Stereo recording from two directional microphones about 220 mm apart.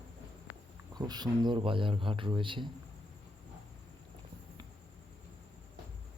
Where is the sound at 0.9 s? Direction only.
20° right (ahead or behind).